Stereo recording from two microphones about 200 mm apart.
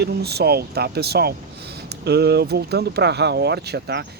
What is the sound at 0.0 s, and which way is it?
Speech, 55° right (ahead or behind).